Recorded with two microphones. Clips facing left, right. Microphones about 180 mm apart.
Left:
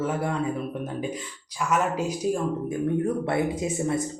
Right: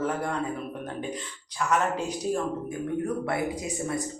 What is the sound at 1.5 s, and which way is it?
Speech, 10° left (ahead or behind).